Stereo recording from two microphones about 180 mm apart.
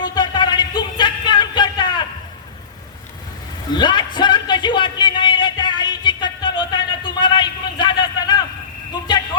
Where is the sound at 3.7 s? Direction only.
25° left (ahead or behind).